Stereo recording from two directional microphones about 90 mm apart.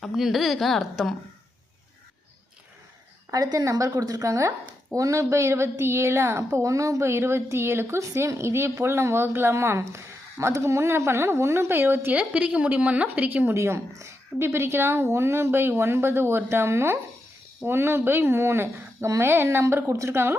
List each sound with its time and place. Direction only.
0.0 s a woman's voice: centre (ahead or behind)
3.3 s a woman's voice: 40° right (ahead or behind); by 13.6 s 20° right (ahead or behind)
13.6 s a woman's voice: 30° right (ahead or behind)